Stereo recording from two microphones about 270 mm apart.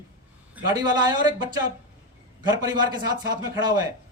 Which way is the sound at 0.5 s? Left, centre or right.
Centre.